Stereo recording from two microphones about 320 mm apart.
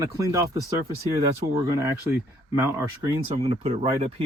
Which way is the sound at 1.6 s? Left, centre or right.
Centre.